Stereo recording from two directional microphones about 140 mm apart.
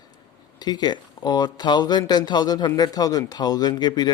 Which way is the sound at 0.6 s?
30° left (ahead or behind).